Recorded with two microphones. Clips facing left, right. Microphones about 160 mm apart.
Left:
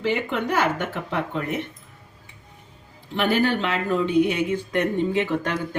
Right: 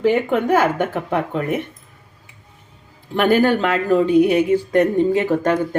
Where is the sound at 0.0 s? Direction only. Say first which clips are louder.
Right 7 dB; 45° right (ahead or behind).